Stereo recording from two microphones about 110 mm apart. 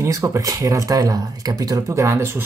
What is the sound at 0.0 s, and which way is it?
Speech, 30° right (ahead or behind).